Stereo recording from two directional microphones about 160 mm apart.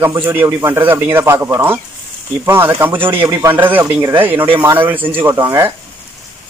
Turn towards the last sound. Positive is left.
turn(degrees=-20)  # may be behind; listen again after turning